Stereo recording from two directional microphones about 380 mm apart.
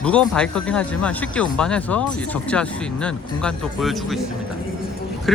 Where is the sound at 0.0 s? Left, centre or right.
Centre.